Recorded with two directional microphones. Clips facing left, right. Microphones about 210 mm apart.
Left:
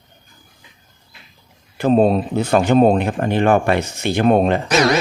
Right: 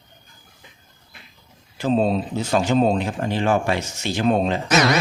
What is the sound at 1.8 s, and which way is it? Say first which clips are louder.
Speech: left 5 dB; 55° left (ahead or behind).